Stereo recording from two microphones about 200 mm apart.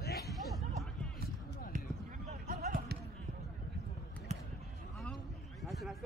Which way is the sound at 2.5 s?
35° right (ahead or behind).